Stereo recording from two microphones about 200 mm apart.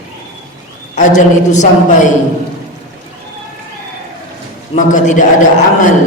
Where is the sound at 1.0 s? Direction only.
40° left (ahead or behind).